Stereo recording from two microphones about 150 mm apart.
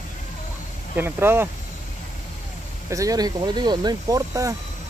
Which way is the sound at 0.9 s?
15° right (ahead or behind).